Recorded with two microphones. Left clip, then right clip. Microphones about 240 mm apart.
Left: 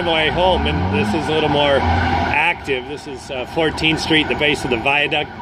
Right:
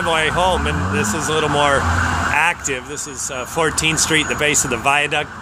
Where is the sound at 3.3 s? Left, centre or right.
Right.